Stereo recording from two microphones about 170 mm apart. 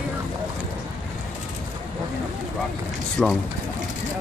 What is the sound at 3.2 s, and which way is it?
Speech, 5° left (ahead or behind).